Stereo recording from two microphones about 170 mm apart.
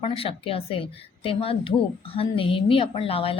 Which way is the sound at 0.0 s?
35° left (ahead or behind).